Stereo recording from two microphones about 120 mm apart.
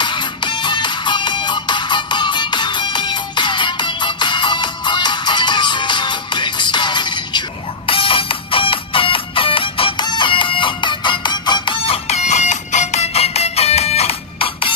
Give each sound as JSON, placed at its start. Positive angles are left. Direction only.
{"t": 0.0, "sound": "music", "side_deg": 40}